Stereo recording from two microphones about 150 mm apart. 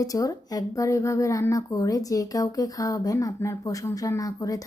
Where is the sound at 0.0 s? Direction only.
25° left (ahead or behind).